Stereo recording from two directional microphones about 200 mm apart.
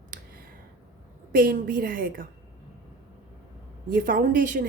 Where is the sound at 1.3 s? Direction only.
45° right (ahead or behind).